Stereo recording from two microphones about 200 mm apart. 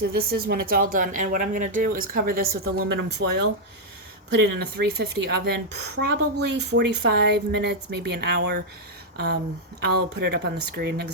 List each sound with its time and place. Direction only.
0.0 s speech: 50° right (ahead or behind)
2.9 s a woman's voice: 60° right (ahead or behind)
4.8 s a woman's voice: 55° right (ahead or behind)
9.1 s a sound: 55° right (ahead or behind)
9.8 s a woman's voice: 55° right (ahead or behind)